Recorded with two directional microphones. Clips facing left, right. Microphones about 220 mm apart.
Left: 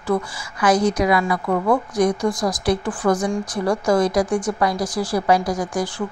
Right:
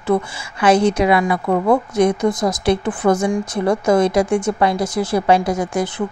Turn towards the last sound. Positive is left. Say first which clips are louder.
# right 3 dB
turn(degrees=-25)  # may be behind; listen again after turning